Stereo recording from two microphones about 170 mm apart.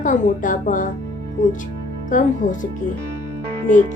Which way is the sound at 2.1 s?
50° left (ahead or behind).